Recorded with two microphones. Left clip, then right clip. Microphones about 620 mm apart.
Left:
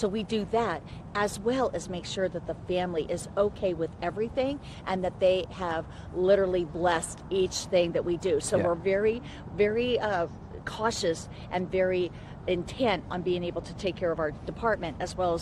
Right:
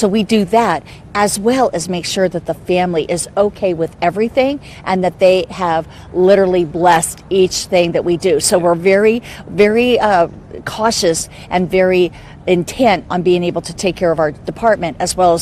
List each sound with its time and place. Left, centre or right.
0.0 s a woman's voice: right